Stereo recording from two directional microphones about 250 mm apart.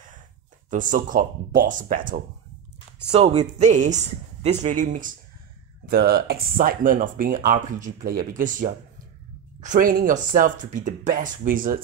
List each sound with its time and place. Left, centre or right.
0.7 s a woman's voice: right